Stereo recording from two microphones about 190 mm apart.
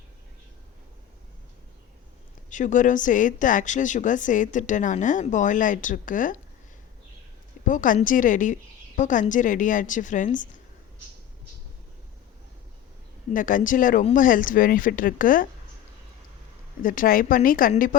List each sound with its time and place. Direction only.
2.5 s speech: 40° left (ahead or behind)
7.7 s a woman's voice: 45° left (ahead or behind)
13.3 s a woman's voice: 45° left (ahead or behind)
16.8 s a woman's voice: 45° left (ahead or behind)